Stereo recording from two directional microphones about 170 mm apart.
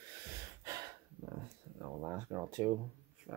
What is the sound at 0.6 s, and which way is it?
Snort, 20° right (ahead or behind).